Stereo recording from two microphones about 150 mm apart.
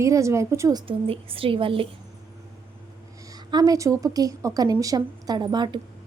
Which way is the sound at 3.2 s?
25° right (ahead or behind).